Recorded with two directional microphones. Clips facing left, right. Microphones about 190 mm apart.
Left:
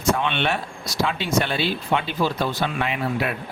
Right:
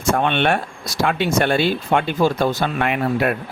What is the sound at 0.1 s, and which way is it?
Speech, 50° right (ahead or behind).